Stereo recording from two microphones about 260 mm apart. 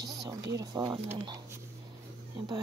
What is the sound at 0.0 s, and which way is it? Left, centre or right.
Speech, centre.